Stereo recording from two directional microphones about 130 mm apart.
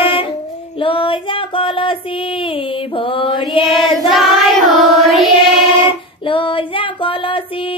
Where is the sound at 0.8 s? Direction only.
40° left (ahead or behind).